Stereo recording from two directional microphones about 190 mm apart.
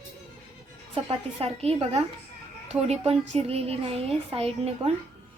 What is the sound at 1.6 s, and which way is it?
Speech, 30° right (ahead or behind).